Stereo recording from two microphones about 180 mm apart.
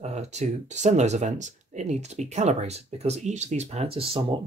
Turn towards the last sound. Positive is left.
turn(degrees=-30)  # may be behind; listen again after turning